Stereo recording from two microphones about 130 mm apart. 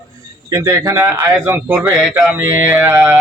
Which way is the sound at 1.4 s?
15° right (ahead or behind).